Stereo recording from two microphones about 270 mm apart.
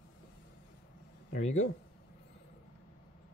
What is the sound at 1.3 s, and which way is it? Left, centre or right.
Speech, left.